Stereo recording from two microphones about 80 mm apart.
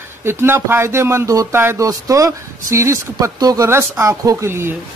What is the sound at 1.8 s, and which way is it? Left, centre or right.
Speech, right.